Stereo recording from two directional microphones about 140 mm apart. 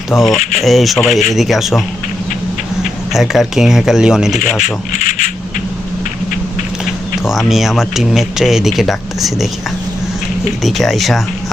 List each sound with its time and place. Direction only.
0.1 s speech: centre (ahead or behind)
3.1 s speech: centre (ahead or behind)
4.6 s speech: 65° left (ahead or behind)
7.3 s speech: centre (ahead or behind)
10.6 s speech: centre (ahead or behind)